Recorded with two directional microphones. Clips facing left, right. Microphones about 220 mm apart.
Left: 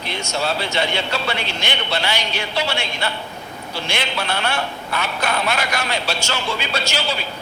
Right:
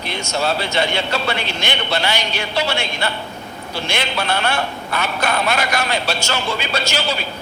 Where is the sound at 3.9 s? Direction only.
45° right (ahead or behind).